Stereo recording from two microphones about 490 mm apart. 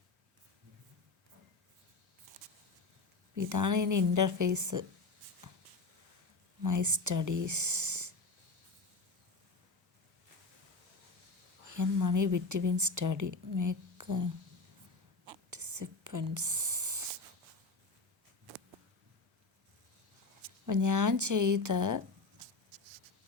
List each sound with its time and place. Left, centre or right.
3.3 s a woman's voice: right
6.6 s speech: right
11.7 s a woman's voice: right
15.4 s a sound: right
20.7 s a woman's voice: right